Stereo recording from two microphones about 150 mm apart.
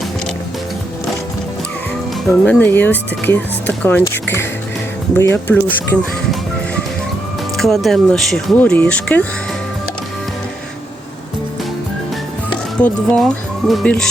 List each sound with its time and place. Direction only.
2.4 s speech: 10° left (ahead or behind)
7.5 s speech: centre (ahead or behind)
12.8 s speech: 5° left (ahead or behind)